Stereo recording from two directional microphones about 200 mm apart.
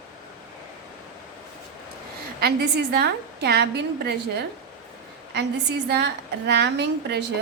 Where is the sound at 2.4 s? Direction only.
55° right (ahead or behind).